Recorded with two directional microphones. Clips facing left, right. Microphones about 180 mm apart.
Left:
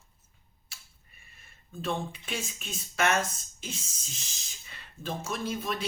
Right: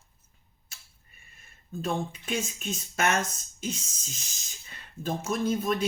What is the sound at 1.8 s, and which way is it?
Speech, 45° right (ahead or behind).